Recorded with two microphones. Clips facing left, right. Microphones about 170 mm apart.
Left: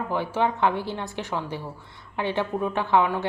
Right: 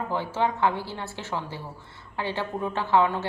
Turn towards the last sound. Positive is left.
turn(degrees=15)  # may be behind; listen again after turning